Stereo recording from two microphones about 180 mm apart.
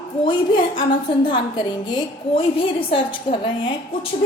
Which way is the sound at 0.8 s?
25° left (ahead or behind).